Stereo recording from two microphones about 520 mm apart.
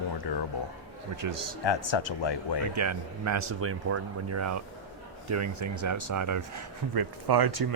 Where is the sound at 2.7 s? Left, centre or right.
Right.